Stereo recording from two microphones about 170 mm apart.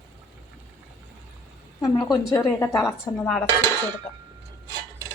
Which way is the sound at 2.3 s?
20° left (ahead or behind).